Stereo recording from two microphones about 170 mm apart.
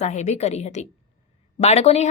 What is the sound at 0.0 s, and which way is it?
A woman's voice, 40° left (ahead or behind).